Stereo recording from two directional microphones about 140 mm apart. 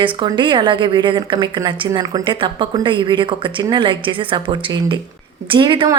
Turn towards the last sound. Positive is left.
turn(degrees=-35)  # may be behind; listen again after turning